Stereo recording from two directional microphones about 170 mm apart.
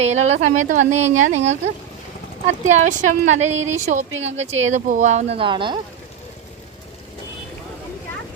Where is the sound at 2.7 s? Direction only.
45° right (ahead or behind); by 5.7 s 30° right (ahead or behind).